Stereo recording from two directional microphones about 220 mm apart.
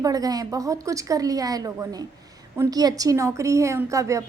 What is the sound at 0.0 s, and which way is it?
A woman's voice, 15° right (ahead or behind).